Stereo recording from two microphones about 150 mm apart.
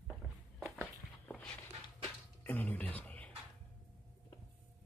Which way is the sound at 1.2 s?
5° left (ahead or behind).